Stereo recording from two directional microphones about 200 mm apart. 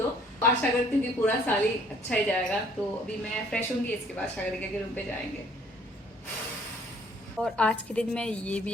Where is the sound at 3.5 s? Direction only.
5° left (ahead or behind).